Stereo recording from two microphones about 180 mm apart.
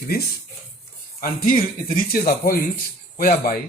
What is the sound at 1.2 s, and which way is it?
Speech, 55° left (ahead or behind).